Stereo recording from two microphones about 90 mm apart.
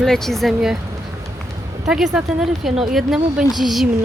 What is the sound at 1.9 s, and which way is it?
Speech, 10° right (ahead or behind).